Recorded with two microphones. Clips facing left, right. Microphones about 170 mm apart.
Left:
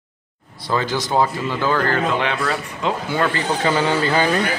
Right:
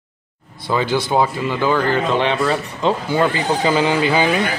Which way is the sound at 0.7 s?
15° right (ahead or behind).